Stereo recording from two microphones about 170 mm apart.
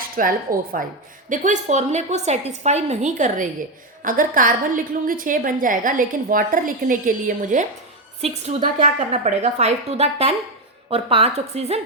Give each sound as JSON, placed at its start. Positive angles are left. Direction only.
{"t": 0.2, "sound": "speech", "side_deg": -55}
{"t": 1.3, "sound": "a woman's voice", "side_deg": -45}